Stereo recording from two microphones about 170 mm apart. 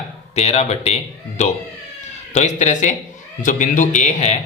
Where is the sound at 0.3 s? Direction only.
40° left (ahead or behind).